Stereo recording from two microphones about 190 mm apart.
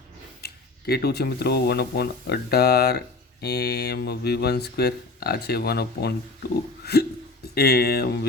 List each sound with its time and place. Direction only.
0.4 s speech: 55° left (ahead or behind)